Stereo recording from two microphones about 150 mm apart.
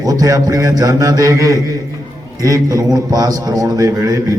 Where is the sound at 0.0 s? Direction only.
25° right (ahead or behind).